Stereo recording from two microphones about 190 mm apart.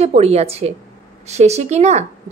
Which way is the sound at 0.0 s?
35° right (ahead or behind).